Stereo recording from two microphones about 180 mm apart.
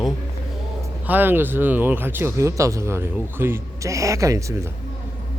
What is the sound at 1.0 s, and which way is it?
Speech, 10° right (ahead or behind).